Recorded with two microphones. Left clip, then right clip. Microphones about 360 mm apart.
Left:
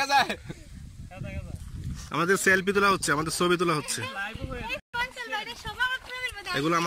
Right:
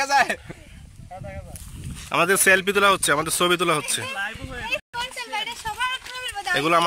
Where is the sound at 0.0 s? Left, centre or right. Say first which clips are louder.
Right 4 dB; centre.